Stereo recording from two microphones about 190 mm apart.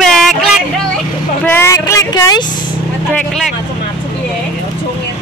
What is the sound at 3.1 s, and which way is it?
Speech, 5° left (ahead or behind).